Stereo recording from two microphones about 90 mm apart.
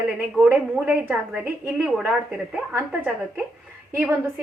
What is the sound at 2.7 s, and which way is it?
Speech, 20° right (ahead or behind).